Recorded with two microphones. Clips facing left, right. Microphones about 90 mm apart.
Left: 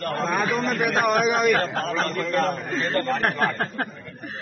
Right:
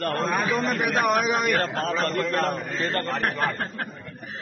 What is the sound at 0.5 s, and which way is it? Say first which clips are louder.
A man's voice: left 1 dB; centre (ahead or behind).